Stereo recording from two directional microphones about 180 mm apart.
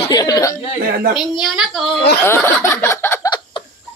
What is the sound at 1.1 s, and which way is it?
Speech, centre (ahead or behind).